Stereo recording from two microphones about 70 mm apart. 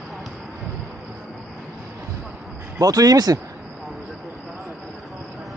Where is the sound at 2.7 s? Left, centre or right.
Right.